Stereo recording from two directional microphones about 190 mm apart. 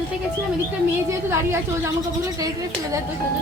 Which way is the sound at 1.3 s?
15° right (ahead or behind).